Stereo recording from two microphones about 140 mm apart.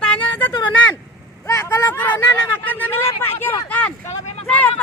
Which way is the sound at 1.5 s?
25° left (ahead or behind).